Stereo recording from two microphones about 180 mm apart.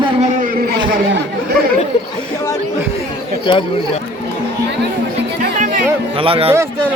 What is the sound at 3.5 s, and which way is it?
Speech, 30° left (ahead or behind).